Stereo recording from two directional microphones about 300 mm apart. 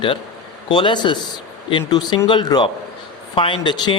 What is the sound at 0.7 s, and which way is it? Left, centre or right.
Speech, centre.